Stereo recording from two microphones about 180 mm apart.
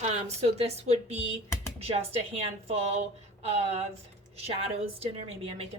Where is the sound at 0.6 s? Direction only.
35° right (ahead or behind).